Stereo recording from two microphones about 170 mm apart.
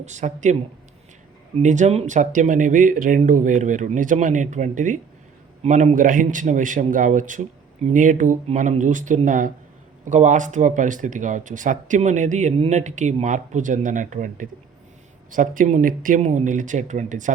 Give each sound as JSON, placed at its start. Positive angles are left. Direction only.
{"t": 0.0, "sound": "speech", "side_deg": -45}
{"t": 1.5, "sound": "speech", "side_deg": -45}